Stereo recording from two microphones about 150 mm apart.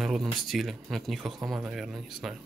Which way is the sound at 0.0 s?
Centre (ahead or behind).